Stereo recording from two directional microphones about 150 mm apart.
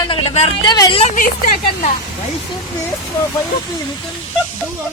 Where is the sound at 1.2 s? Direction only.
65° left (ahead or behind).